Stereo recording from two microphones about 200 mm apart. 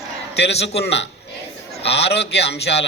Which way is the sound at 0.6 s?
60° left (ahead or behind).